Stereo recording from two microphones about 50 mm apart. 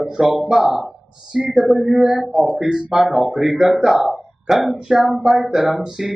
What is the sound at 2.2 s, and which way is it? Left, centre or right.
Speech, centre.